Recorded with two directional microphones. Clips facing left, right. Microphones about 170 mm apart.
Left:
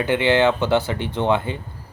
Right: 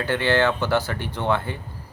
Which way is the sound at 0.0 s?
20° left (ahead or behind).